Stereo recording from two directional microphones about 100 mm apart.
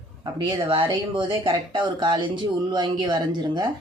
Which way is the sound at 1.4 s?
35° right (ahead or behind).